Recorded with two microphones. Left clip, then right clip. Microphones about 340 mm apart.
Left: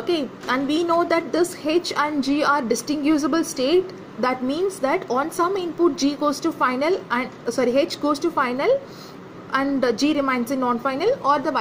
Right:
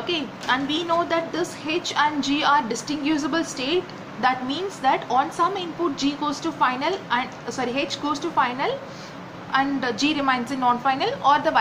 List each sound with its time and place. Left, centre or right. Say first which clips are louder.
0.0 s a woman's voice: left 2 dB; left